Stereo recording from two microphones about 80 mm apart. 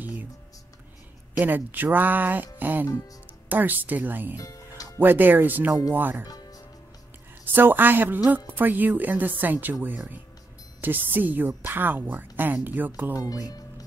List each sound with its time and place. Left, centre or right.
0.0 s music: right
1.4 s a woman's voice: right
4.4 s music: left
4.9 s a woman's voice: right
6.2 s music: left
7.4 s a woman's voice: right
13.2 s speech: left